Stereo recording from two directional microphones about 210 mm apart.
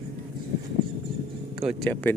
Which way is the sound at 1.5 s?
Centre (ahead or behind).